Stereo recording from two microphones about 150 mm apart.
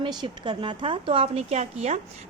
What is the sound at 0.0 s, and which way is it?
A woman's voice, 30° right (ahead or behind).